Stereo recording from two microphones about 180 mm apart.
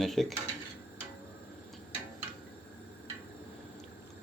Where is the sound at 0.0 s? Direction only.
Centre (ahead or behind).